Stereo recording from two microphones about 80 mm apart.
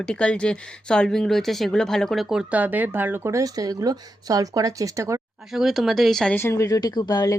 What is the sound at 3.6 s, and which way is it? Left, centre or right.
Speech, right.